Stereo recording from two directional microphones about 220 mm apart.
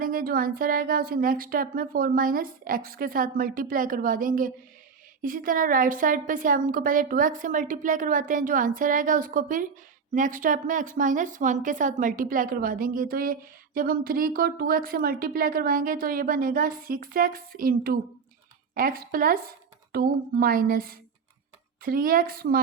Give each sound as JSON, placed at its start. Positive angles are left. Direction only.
{"t": 0.0, "sound": "speech", "side_deg": -40}